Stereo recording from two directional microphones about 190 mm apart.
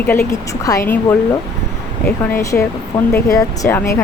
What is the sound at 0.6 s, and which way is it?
Speech, 15° left (ahead or behind).